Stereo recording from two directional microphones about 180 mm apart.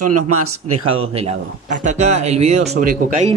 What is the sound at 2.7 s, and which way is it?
Speech, 50° right (ahead or behind).